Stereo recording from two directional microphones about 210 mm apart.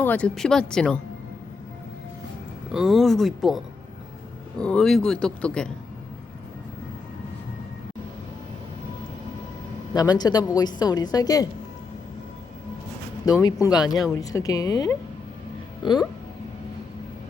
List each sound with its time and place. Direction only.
0.0 s speech: 5° left (ahead or behind)
2.7 s speech: centre (ahead or behind)
4.6 s speech: 5° left (ahead or behind)
9.9 s a woman's voice: 20° left (ahead or behind)
13.4 s a woman's voice: 20° left (ahead or behind)
13.8 s speech: centre (ahead or behind)
14.2 s speech: 15° left (ahead or behind)